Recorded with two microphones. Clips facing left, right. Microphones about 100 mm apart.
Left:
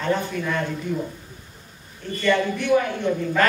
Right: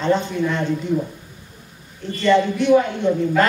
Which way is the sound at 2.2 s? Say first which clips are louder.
Right 5 dB; 20° right (ahead or behind).